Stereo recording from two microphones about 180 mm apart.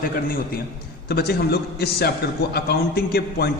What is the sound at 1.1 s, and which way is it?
A man's voice, 65° left (ahead or behind).